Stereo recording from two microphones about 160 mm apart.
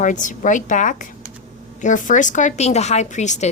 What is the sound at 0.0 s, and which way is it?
Speech, 55° left (ahead or behind).